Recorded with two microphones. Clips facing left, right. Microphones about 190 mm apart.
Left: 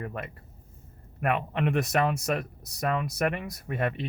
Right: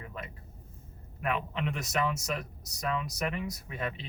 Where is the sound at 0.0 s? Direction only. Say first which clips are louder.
Left 7 dB; 60° left (ahead or behind).